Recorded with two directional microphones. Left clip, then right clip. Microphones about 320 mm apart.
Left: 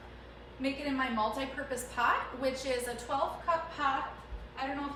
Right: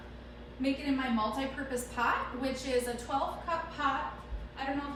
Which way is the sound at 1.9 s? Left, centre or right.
Centre.